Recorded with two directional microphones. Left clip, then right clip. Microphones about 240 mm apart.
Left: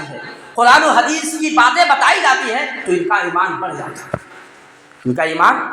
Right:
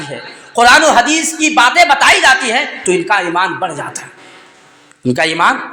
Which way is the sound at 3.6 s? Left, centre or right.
Right.